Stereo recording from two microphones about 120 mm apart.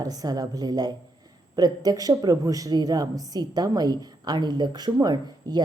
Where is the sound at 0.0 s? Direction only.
30° right (ahead or behind).